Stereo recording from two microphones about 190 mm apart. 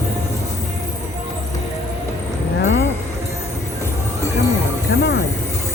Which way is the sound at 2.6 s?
70° left (ahead or behind).